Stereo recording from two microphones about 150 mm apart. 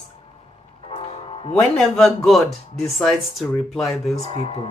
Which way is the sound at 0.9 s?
35° left (ahead or behind).